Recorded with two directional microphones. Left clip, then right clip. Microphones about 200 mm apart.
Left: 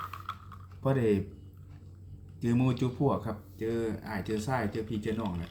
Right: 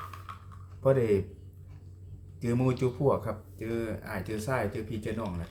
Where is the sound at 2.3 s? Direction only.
20° right (ahead or behind).